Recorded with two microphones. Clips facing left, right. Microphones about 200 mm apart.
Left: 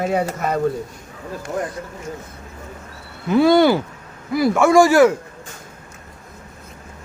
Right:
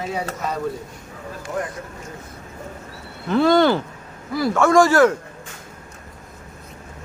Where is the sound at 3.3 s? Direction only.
10° left (ahead or behind).